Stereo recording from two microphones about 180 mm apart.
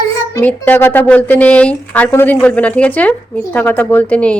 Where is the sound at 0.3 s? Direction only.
10° left (ahead or behind).